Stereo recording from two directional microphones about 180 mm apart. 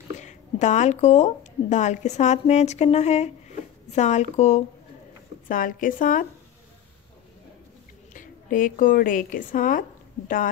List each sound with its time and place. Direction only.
0.2 s speech: 40° left (ahead or behind)
5.5 s speech: 50° left (ahead or behind)
8.1 s a woman's voice: 45° left (ahead or behind)